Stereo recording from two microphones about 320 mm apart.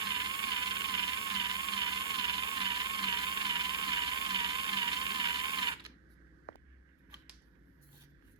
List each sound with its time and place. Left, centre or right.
0.0 s music: centre
6.5 s vehicle: left